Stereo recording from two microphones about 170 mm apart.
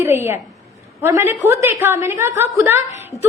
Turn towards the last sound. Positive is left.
turn(degrees=0)  # may be behind; listen again after turning